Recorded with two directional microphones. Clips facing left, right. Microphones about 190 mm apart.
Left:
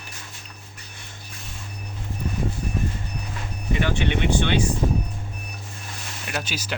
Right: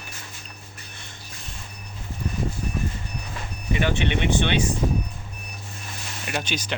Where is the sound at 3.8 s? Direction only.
20° right (ahead or behind).